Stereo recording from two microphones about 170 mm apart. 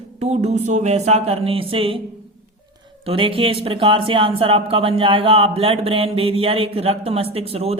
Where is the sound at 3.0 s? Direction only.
30° right (ahead or behind).